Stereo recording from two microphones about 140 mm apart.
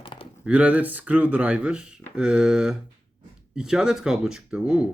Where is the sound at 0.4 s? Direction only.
10° right (ahead or behind).